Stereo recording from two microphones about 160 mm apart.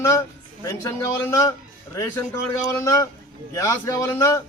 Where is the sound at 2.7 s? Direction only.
20° left (ahead or behind).